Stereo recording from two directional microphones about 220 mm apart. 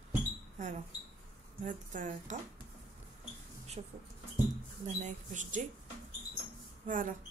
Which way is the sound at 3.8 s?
30° right (ahead or behind).